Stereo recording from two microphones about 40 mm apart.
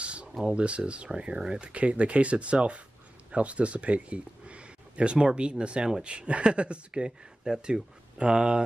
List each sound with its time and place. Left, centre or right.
0.0 s a sound: right
0.4 s speech: right
7.1 s speech: centre